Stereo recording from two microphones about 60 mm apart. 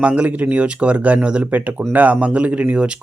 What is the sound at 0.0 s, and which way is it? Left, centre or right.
Speech, right.